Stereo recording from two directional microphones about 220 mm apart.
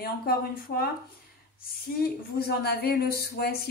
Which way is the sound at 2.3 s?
45° left (ahead or behind).